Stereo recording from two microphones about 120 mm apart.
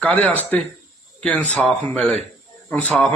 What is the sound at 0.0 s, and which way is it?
A man's voice, 10° left (ahead or behind).